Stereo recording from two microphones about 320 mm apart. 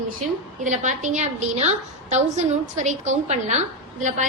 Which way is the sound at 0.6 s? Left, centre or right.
Right.